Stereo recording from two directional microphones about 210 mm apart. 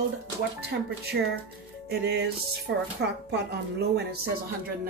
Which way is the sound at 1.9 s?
50° right (ahead or behind).